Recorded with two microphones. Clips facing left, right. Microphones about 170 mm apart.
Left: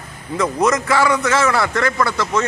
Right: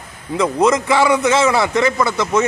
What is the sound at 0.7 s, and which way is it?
A man's voice, 20° right (ahead or behind).